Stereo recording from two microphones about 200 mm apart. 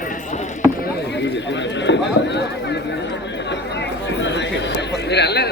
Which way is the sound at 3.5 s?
60° left (ahead or behind).